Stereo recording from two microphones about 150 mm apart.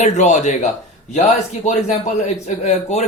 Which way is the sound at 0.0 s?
50° left (ahead or behind).